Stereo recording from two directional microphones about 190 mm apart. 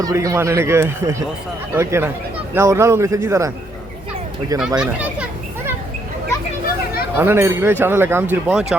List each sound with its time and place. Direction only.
0.0 s speech: 15° right (ahead or behind)
4.8 s children playing: 5° right (ahead or behind)
7.2 s speech: 10° right (ahead or behind)